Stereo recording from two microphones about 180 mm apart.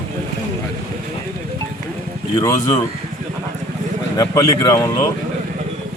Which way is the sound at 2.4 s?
20° left (ahead or behind).